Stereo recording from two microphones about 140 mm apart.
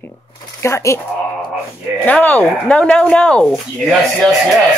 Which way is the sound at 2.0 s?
10° left (ahead or behind).